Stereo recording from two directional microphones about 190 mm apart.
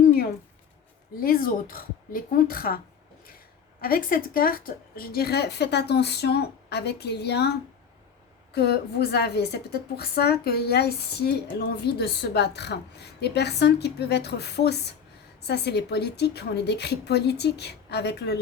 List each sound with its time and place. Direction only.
1.2 s a woman's voice: 50° left (ahead or behind)
8.5 s a woman's voice: 60° left (ahead or behind)